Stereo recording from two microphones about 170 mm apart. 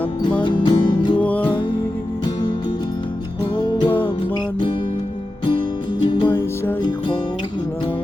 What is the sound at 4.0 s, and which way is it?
Music, 30° left (ahead or behind).